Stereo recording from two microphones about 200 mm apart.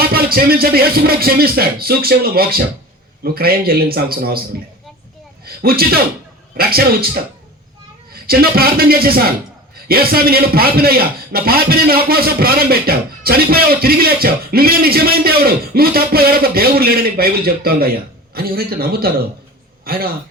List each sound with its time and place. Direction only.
0.0 s a man's voice: 50° right (ahead or behind)
5.6 s a man's voice: 50° right (ahead or behind)